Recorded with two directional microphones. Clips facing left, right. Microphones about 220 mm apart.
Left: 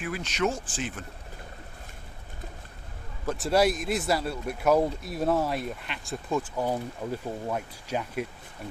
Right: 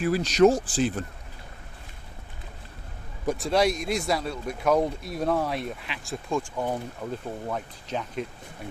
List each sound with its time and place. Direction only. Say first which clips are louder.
0.0 s speech: right 10 dB; 35° right (ahead or behind)
3.3 s speech: left 1 dB; 5° left (ahead or behind)